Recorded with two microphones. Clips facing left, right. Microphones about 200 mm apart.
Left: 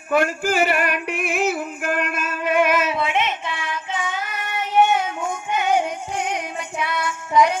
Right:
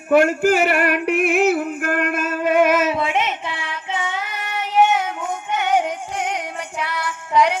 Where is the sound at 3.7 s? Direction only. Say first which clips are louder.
Right 1 dB; 25° right (ahead or behind).